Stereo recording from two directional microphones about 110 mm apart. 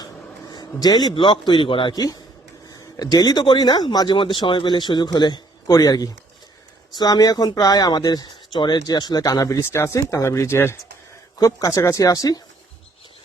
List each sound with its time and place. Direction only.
0.5 s a man's voice: 35° left (ahead or behind)
1.9 s speech: 35° left (ahead or behind)